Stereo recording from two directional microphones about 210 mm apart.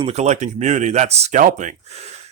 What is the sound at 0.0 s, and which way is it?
A man's voice, 30° right (ahead or behind).